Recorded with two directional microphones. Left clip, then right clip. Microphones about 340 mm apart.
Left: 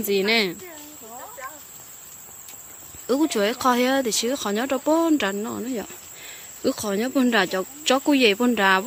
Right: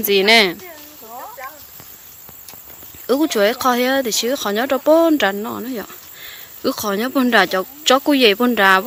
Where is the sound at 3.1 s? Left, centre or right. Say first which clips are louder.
Right 6 dB; centre.